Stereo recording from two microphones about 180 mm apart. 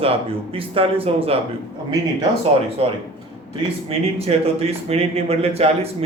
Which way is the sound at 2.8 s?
35° right (ahead or behind).